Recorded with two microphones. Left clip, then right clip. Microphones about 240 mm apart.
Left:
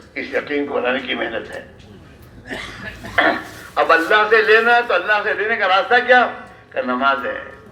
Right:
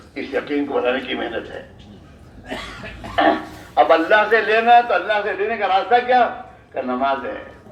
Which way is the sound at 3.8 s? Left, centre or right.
Left.